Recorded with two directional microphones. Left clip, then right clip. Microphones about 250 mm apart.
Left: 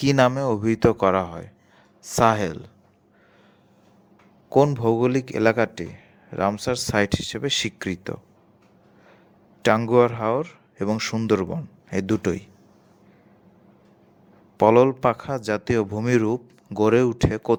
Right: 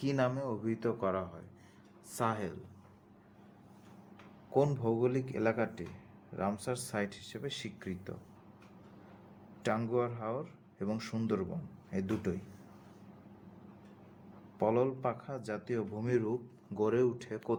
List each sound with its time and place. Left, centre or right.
0.0 s speech: left
4.4 s speech: left
9.6 s speech: left
14.6 s speech: left